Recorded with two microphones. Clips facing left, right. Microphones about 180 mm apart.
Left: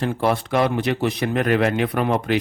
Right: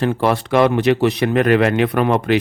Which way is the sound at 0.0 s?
80° right.